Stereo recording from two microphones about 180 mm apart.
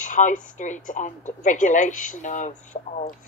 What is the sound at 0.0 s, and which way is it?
Speech, 45° left (ahead or behind).